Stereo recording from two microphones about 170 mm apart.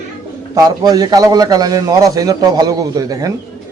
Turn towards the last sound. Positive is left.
turn(degrees=-20)  # may be behind; listen again after turning